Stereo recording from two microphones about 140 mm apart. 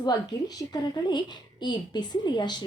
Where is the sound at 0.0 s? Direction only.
30° left (ahead or behind).